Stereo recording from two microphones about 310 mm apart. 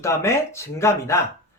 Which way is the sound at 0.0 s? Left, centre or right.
Centre.